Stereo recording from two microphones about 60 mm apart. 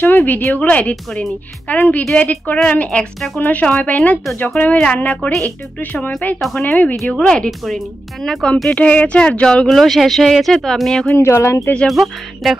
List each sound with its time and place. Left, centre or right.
0.0 s speech: left
0.6 s speech: left
7.2 s speech: centre
7.6 s speech: centre
8.7 s speech: left
9.7 s speech: centre
11.1 s speech: left
11.9 s speech: centre